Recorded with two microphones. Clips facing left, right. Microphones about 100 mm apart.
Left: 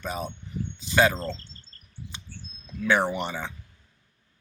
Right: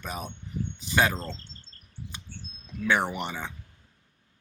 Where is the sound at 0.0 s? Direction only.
25° left (ahead or behind).